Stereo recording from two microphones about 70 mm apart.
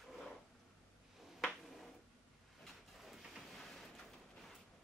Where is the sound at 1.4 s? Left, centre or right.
Centre.